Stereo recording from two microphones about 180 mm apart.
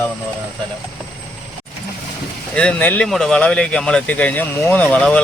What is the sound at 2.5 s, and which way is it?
Speech, 5° left (ahead or behind).